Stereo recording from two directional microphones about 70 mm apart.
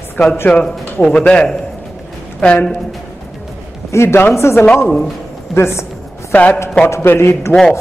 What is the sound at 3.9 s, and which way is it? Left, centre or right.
A woman's voice, left.